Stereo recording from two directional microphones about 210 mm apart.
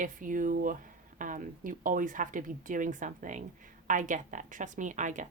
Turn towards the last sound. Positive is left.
turn(degrees=-35)  # may be behind; listen again after turning